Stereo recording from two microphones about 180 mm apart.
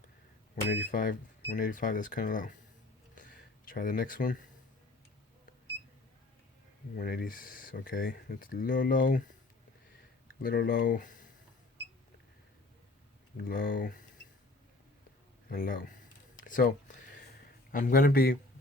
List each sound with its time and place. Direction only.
0.5 s speech: 50° left (ahead or behind)
3.2 s a sound: 50° left (ahead or behind)
6.9 s speech: 55° left (ahead or behind)
10.4 s speech: 55° left (ahead or behind)
13.3 s speech: 50° left (ahead or behind)
15.4 s speech: 50° left (ahead or behind)
16.4 s a sound: 45° left (ahead or behind)